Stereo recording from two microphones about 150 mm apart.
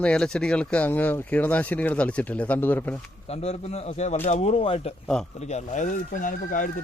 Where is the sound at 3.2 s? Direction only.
45° left (ahead or behind); by 6.7 s 65° left (ahead or behind).